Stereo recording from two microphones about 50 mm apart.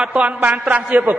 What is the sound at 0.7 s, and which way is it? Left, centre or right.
Speech, right.